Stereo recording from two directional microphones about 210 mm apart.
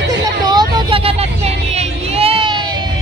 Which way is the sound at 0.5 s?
20° right (ahead or behind).